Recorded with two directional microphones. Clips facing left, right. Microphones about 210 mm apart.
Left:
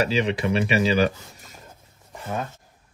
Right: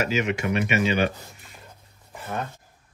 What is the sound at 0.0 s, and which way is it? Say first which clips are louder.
Speech: left 2 dB; 35° left (ahead or behind).